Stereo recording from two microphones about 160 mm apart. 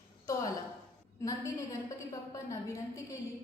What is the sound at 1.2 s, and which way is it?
A woman's voice, 20° left (ahead or behind).